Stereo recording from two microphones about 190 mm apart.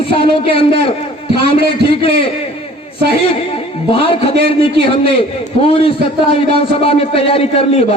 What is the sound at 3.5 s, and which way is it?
A man's voice, 30° left (ahead or behind).